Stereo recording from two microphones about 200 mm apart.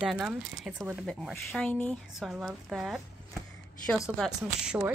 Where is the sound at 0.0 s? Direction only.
5° right (ahead or behind).